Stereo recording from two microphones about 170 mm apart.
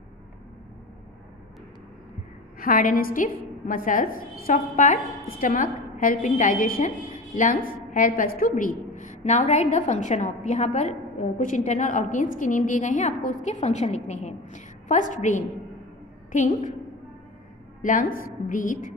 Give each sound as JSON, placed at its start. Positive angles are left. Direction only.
{"t": 2.6, "sound": "a woman's voice", "side_deg": 55}
{"t": 17.8, "sound": "a woman's voice", "side_deg": 55}